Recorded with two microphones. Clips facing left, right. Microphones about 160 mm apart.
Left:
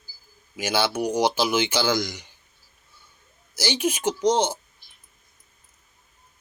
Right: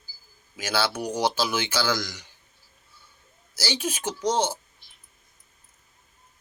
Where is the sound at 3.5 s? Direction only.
20° left (ahead or behind).